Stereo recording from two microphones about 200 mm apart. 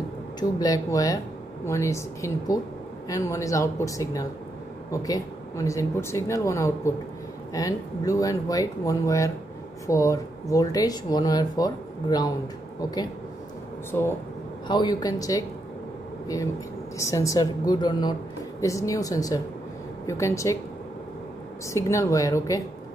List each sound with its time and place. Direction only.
0.4 s speech: 20° left (ahead or behind)
13.9 s speech: 15° left (ahead or behind)
17.0 s speech: 15° left (ahead or behind)
21.7 s speech: 15° left (ahead or behind)